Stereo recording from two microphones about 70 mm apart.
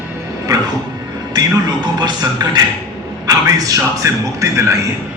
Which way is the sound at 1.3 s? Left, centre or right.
Right.